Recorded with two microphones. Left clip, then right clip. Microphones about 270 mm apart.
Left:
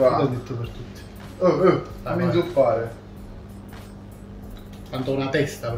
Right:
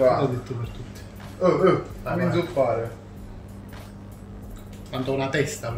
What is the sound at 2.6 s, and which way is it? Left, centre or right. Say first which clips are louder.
Speech: left 4 dB; centre.